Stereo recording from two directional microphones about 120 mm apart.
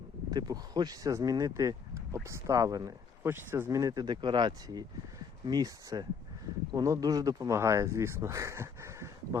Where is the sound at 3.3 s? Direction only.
20° right (ahead or behind).